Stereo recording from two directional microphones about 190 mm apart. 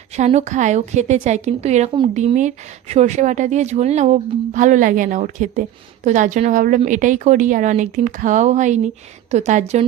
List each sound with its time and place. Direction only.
0.2 s a woman's voice: 35° right (ahead or behind)